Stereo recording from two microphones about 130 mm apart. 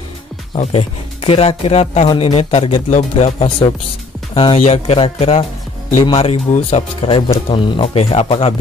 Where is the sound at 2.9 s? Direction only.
60° left (ahead or behind).